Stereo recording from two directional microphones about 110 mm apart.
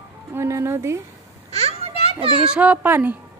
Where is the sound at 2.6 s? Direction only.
15° right (ahead or behind).